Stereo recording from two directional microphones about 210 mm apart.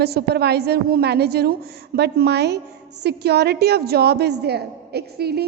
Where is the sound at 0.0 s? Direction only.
50° right (ahead or behind).